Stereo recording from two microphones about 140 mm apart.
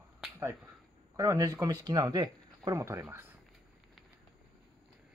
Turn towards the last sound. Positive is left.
turn(degrees=-20)  # may be behind; listen again after turning